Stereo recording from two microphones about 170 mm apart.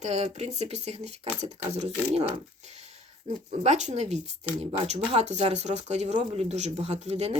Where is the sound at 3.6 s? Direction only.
40° right (ahead or behind).